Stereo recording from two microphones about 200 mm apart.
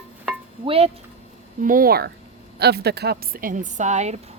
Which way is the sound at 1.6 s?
45° right (ahead or behind).